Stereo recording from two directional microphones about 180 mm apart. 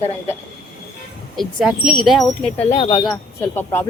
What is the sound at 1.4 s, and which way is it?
Speech, centre (ahead or behind).